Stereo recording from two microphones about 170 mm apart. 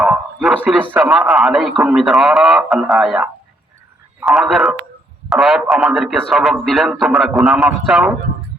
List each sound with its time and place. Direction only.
0.0 s a man's voice: 5° right (ahead or behind)